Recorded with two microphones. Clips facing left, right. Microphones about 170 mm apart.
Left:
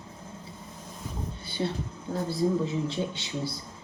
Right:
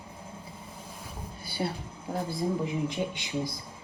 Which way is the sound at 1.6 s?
10° right (ahead or behind).